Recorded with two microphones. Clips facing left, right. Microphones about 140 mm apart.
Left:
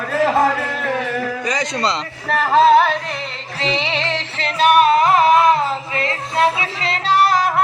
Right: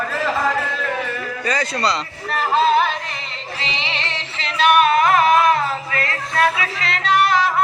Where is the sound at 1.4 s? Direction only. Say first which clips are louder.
Even; 15° left (ahead or behind).